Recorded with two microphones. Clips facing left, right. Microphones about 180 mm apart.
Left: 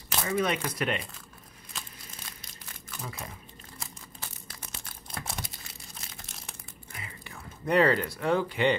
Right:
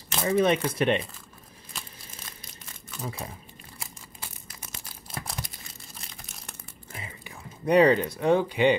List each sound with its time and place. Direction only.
0.3 s speech: 30° right (ahead or behind)
3.0 s speech: 30° right (ahead or behind)
5.1 s crumpling: centre (ahead or behind)
7.2 s speech: 15° right (ahead or behind)